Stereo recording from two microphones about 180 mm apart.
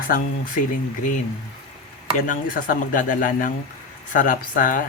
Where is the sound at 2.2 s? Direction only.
50° left (ahead or behind).